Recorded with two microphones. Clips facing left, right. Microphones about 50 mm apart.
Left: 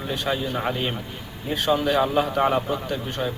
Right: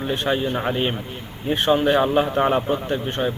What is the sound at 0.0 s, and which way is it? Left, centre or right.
Speech, right.